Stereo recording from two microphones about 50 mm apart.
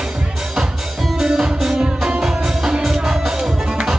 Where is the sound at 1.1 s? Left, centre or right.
Centre.